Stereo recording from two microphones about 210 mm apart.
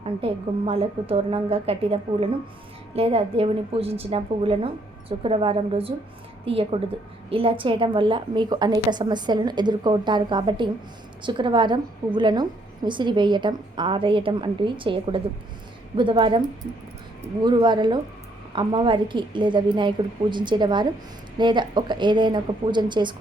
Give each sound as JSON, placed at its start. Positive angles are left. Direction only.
{"t": 0.0, "sound": "a woman's voice", "side_deg": -25}
{"t": 17.4, "sound": "a woman's voice", "side_deg": -20}